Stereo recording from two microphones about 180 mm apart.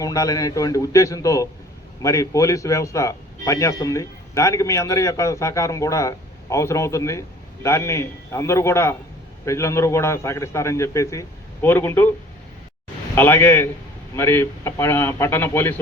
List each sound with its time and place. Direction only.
0.0 s a man's voice: 20° left (ahead or behind)
13.1 s speech: 15° left (ahead or behind)